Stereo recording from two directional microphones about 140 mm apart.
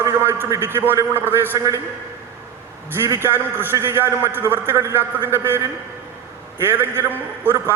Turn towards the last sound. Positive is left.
turn(degrees=-15)  # may be behind; listen again after turning